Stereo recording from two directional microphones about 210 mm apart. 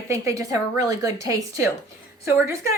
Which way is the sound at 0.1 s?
15° right (ahead or behind).